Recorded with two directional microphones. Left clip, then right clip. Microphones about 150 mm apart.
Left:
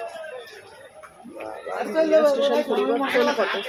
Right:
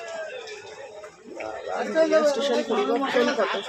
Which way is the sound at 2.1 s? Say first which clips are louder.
Left 3 dB; centre (ahead or behind).